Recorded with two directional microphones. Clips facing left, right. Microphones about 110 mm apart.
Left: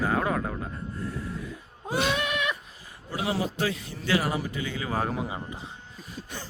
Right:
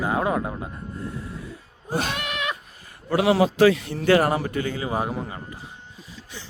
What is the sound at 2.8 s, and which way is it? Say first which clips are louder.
A man's voice: right 10 dB; 70° right (ahead or behind).